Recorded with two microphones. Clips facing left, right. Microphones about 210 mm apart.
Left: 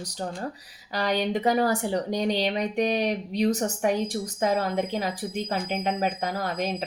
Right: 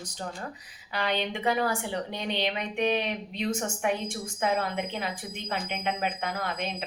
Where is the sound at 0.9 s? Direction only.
40° left (ahead or behind).